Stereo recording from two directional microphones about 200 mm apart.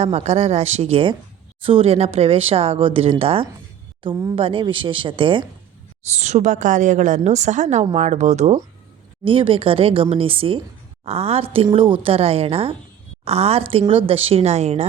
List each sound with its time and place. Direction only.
0.0 s a woman's voice: 30° right (ahead or behind)
4.1 s a woman's voice: 15° right (ahead or behind); by 14.8 s 30° right (ahead or behind)